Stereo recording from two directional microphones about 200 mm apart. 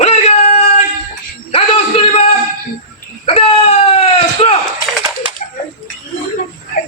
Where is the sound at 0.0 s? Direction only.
30° left (ahead or behind).